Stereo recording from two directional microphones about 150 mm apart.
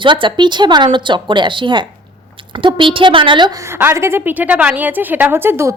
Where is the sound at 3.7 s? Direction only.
15° right (ahead or behind).